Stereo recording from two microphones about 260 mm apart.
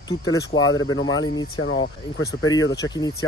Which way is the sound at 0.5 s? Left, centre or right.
Left.